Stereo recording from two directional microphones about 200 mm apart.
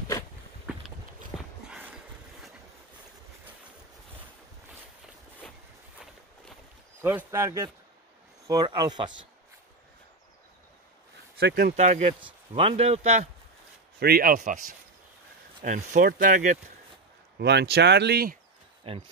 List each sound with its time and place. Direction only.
1.3 s a sound: centre (ahead or behind)
7.0 s speech: 10° right (ahead or behind)
11.3 s speech: 55° right (ahead or behind)
11.7 s speech: 35° right (ahead or behind)
13.9 s speech: 50° right (ahead or behind)
17.4 s speech: 55° right (ahead or behind)
18.9 s speech: 25° right (ahead or behind)